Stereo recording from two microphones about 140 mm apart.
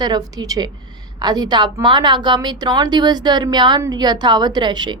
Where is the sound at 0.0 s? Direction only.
30° right (ahead or behind).